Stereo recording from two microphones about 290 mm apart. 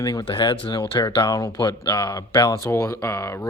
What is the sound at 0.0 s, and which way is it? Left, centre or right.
Speech, centre.